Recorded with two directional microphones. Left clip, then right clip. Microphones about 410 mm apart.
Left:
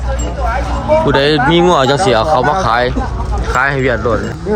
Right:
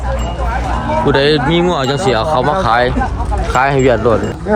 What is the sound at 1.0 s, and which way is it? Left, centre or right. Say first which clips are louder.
Speech: left 1 dB; centre.